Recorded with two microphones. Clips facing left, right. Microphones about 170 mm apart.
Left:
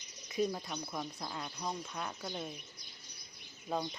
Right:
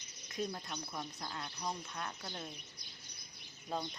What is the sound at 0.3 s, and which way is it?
Speech, 10° left (ahead or behind).